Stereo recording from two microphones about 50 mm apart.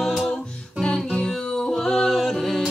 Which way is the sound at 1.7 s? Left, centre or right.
Centre.